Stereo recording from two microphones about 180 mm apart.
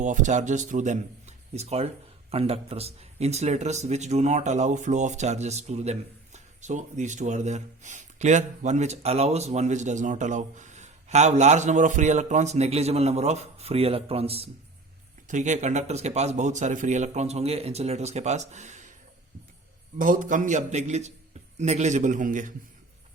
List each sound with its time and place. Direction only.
0.0 s a man's voice: 45° right (ahead or behind)
20.0 s a man's voice: 50° right (ahead or behind)